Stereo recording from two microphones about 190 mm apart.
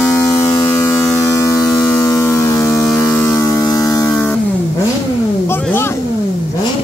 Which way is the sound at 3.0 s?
15° left (ahead or behind).